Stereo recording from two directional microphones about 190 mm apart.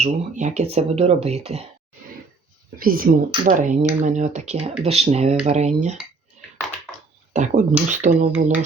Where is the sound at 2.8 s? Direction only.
50° right (ahead or behind).